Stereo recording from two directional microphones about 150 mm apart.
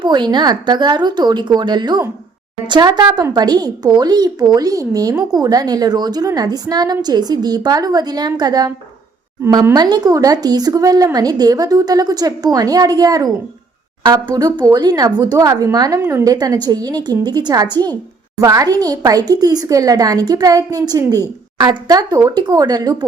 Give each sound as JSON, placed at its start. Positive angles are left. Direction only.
{"t": 0.0, "sound": "speech", "side_deg": -30}